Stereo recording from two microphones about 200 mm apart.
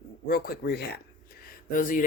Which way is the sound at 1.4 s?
40° left (ahead or behind).